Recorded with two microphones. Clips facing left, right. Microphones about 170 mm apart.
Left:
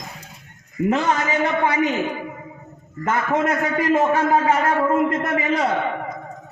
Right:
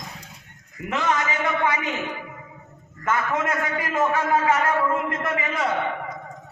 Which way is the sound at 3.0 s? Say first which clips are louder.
Left 4 dB; 30° left (ahead or behind).